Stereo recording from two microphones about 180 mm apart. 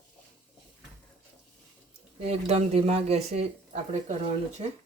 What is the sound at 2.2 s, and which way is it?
Speech, 35° right (ahead or behind).